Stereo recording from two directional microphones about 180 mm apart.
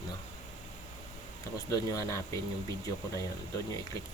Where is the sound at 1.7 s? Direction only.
20° left (ahead or behind).